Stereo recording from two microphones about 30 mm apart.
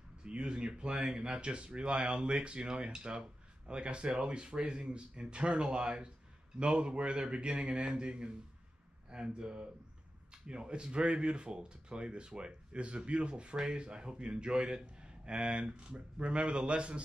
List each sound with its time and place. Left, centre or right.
0.2 s a man's voice: right
5.8 s speech: right
6.6 s a man's voice: right
13.6 s a man's voice: right